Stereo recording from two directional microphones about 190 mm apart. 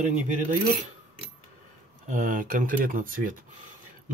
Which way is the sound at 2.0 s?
40° right (ahead or behind).